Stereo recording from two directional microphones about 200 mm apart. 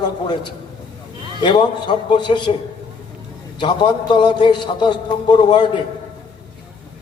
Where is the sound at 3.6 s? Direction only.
25° left (ahead or behind).